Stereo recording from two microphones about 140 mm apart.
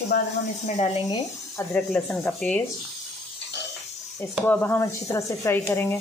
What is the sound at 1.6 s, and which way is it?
Speech, 10° left (ahead or behind).